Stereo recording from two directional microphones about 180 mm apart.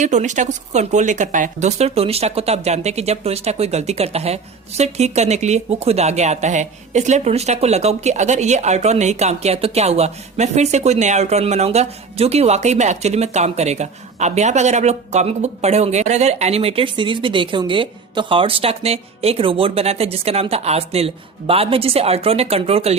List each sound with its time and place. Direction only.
0.0 s speech: 40° right (ahead or behind)